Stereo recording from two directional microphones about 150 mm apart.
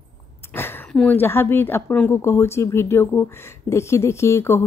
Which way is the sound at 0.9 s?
10° left (ahead or behind).